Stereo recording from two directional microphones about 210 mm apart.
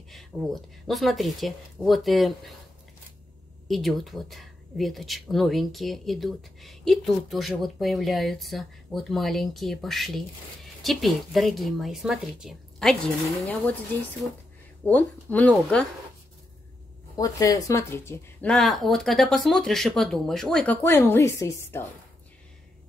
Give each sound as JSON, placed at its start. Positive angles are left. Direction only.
{"t": 0.1, "sound": "speech", "side_deg": 0}
{"t": 3.6, "sound": "speech", "side_deg": 0}
{"t": 14.9, "sound": "speech", "side_deg": 5}
{"t": 17.2, "sound": "speech", "side_deg": 15}